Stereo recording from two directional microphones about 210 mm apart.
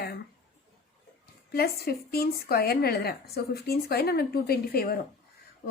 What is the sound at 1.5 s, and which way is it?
A woman's voice, 50° left (ahead or behind).